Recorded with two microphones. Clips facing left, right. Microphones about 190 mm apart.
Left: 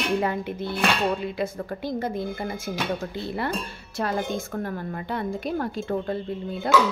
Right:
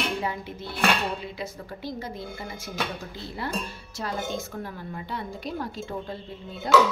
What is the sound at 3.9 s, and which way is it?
A woman's voice, 55° left (ahead or behind).